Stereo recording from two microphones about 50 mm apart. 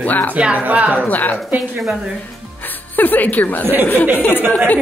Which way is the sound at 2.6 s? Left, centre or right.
Left.